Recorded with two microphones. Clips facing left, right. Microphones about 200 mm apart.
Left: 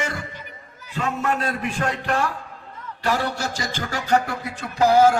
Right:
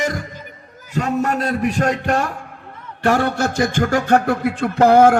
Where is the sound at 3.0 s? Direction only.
55° right (ahead or behind).